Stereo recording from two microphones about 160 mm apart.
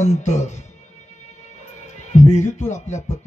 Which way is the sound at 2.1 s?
45° left (ahead or behind).